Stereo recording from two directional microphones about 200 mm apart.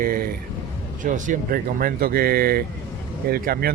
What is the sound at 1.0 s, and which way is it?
Speech, 40° right (ahead or behind).